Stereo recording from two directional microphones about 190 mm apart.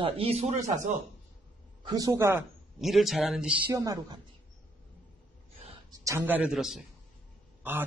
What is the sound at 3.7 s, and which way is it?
Speech, 20° right (ahead or behind).